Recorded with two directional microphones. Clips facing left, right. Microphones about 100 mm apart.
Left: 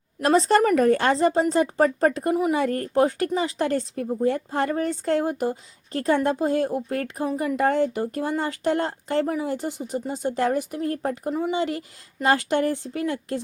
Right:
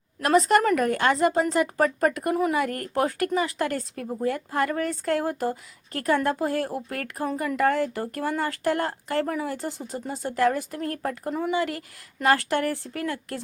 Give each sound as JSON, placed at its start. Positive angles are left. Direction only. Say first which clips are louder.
{"t": 0.2, "sound": "speech", "louder": "left 1 dB", "side_deg": 30}